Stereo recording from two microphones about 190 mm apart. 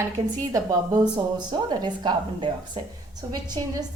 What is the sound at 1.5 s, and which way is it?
A woman's voice, 25° right (ahead or behind).